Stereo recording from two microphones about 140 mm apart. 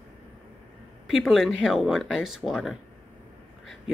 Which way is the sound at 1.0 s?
Centre (ahead or behind).